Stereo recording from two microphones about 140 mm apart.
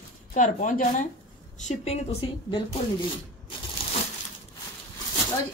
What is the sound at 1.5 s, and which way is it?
A woman's voice, 55° left (ahead or behind).